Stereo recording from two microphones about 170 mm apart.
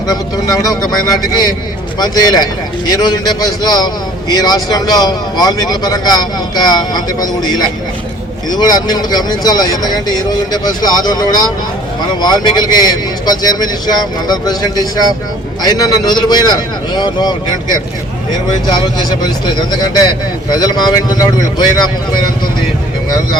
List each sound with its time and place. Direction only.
0.1 s speech: 20° left (ahead or behind)
20.5 s speech: 25° left (ahead or behind)